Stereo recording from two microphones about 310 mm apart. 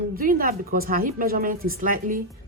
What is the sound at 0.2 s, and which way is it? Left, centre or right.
A woman's voice, right.